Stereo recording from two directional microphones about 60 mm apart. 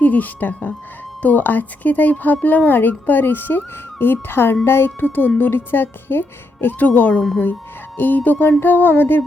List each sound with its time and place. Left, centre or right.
0.0 s speech: left